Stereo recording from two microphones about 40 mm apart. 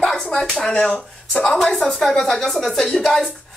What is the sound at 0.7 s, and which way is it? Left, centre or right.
Speech, left.